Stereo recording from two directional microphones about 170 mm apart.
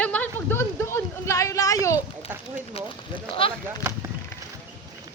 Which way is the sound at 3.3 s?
35° left (ahead or behind).